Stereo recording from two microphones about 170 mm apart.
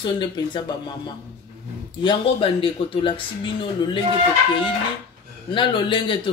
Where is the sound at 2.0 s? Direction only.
30° left (ahead or behind).